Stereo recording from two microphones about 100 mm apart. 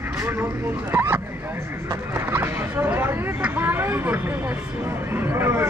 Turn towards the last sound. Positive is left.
turn(degrees=-25)  # may be behind; listen again after turning